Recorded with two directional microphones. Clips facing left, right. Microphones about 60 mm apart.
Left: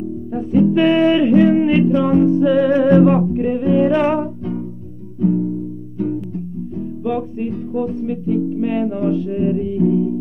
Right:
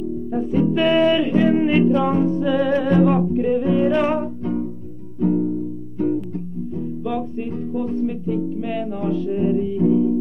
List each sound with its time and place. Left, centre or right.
0.3 s music: centre
1.5 s music: centre; by 3.2 s left
3.2 s music: centre
5.2 s music: centre
7.0 s music: centre
7.7 s music: centre
8.5 s music: centre
9.8 s music: centre